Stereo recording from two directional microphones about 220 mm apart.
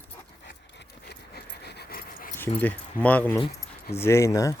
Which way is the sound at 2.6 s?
5° left (ahead or behind).